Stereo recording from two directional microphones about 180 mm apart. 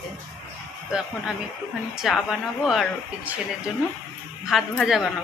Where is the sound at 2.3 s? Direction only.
Centre (ahead or behind).